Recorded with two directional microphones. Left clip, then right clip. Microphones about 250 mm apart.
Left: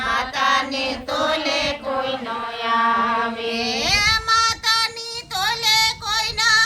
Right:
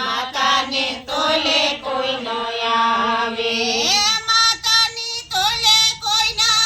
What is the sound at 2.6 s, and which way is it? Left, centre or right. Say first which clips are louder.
Chant: right 1 dB; right.